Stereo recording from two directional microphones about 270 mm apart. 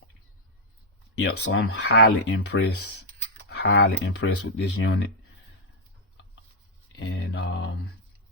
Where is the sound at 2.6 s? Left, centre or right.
Left.